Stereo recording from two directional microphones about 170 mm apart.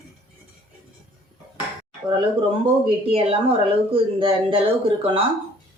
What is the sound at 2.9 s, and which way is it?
Speech, 30° right (ahead or behind).